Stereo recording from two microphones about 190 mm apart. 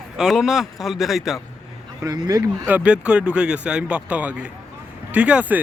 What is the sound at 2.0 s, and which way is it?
Speech, 20° right (ahead or behind).